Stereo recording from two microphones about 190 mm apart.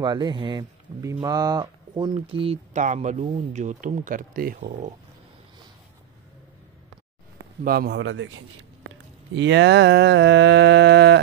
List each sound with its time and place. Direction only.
0.0 s speech: 25° right (ahead or behind); by 4.9 s 40° right (ahead or behind)
7.6 s speech: 55° right (ahead or behind)
8.0 s a man's voice: 85° right
9.3 s mantra: 70° right (ahead or behind)